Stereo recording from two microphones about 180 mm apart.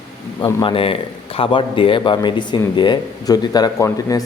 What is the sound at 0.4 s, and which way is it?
Speech, 30° left (ahead or behind).